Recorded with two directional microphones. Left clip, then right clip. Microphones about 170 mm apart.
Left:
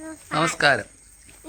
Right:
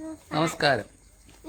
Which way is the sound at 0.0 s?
Centre (ahead or behind).